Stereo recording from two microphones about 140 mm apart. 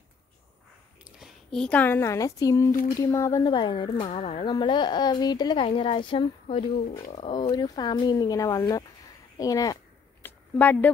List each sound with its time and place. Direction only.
1.0 s speech: centre (ahead or behind); by 4.1 s 35° left (ahead or behind)
4.1 s speech: 50° left (ahead or behind)
4.5 s speech: 35° left (ahead or behind)
10.2 s a sound: 10° left (ahead or behind)